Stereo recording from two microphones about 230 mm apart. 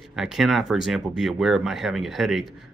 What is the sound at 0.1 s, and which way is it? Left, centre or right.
Speech, centre.